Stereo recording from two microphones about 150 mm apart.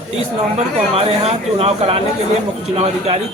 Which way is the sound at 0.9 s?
40° right (ahead or behind).